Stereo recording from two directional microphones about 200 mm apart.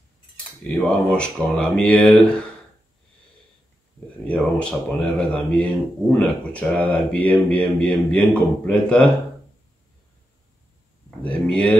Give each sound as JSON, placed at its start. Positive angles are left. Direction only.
{"t": 0.7, "sound": "speech", "side_deg": 10}
{"t": 4.3, "sound": "speech", "side_deg": 5}
{"t": 11.1, "sound": "a sound", "side_deg": 5}